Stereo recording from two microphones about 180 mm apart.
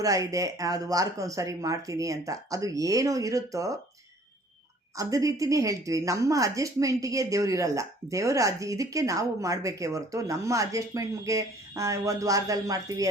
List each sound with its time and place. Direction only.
0.0 s speech: 20° right (ahead or behind)
4.9 s a woman's voice: 20° right (ahead or behind)